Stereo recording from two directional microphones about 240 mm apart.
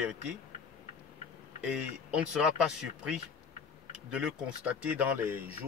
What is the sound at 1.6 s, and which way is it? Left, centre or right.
Speech, centre.